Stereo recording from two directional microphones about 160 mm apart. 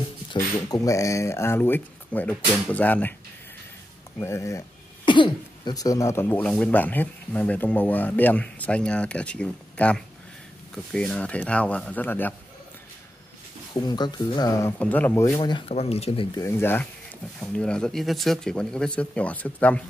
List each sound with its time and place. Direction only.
0.3 s speech: 25° left (ahead or behind)
4.2 s speech: 15° left (ahead or behind)
5.0 s speech: 30° left (ahead or behind); by 12.4 s 10° left (ahead or behind)
13.7 s speech: 25° left (ahead or behind)
15.7 s speech: 40° left (ahead or behind)
16.3 s speech: 15° left (ahead or behind)